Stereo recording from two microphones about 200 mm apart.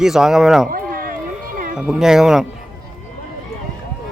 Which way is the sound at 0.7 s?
45° right (ahead or behind).